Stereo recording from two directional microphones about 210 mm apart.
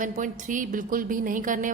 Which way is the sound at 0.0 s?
40° right (ahead or behind).